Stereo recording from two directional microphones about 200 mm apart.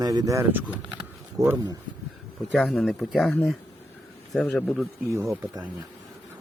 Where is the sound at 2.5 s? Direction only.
Centre (ahead or behind).